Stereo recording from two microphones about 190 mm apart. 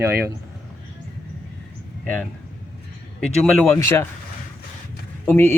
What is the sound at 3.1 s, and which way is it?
Speech, 5° left (ahead or behind).